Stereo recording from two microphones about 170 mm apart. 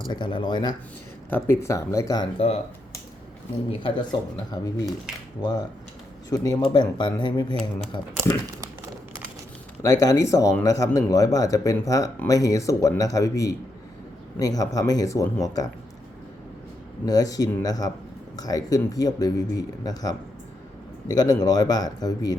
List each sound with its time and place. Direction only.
0.1 s speech: 30° left (ahead or behind)
3.7 s speech: 30° left (ahead or behind)
9.8 s speech: 20° left (ahead or behind)
17.1 s speech: 20° left (ahead or behind)